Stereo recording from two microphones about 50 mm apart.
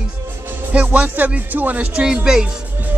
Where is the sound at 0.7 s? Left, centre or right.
Right.